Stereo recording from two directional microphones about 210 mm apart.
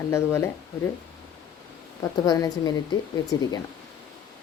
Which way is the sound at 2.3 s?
20° left (ahead or behind).